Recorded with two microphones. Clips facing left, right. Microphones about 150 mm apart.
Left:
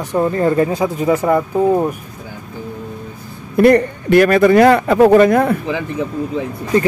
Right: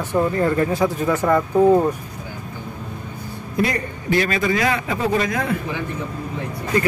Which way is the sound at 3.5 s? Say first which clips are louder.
Left 12 dB; 60° left (ahead or behind).